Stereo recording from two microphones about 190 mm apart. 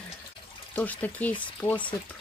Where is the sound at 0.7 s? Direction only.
10° left (ahead or behind).